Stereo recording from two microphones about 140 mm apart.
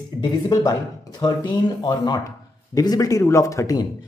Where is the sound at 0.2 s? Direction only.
25° left (ahead or behind).